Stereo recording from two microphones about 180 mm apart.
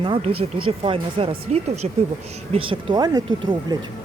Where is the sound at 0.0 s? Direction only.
30° right (ahead or behind).